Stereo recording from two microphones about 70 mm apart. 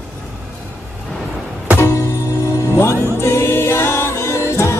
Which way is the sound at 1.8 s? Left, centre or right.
Left.